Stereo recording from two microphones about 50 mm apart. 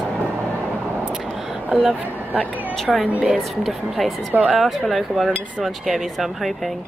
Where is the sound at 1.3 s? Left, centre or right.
Centre.